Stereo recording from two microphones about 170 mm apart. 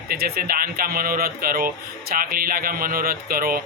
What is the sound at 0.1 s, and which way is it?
Speech, 65° right (ahead or behind).